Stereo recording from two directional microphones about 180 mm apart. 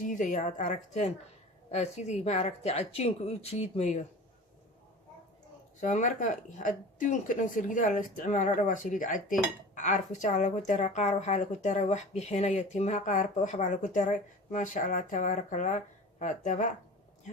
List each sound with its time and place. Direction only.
0.0 s a woman's voice: 45° left (ahead or behind)
5.8 s a woman's voice: 45° left (ahead or behind)